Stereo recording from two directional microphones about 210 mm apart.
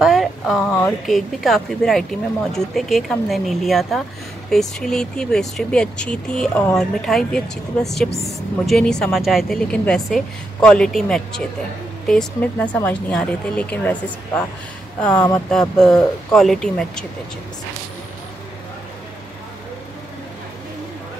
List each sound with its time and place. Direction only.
0.0 s speech: centre (ahead or behind)
6.5 s speech: 15° left (ahead or behind)
6.8 s speech: centre (ahead or behind)
15.1 s speech: 20° left (ahead or behind)
15.8 s speech: 5° left (ahead or behind)